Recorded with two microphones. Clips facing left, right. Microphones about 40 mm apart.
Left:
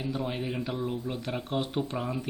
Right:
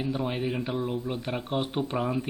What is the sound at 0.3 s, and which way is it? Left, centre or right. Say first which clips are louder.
Speech: right 3 dB; centre.